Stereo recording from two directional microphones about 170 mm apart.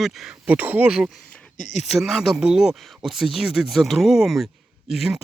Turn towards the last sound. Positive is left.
turn(degrees=0)  # may be behind; listen again after turning